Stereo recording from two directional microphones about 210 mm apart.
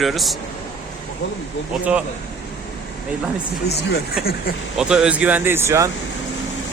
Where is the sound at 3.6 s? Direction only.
50° left (ahead or behind).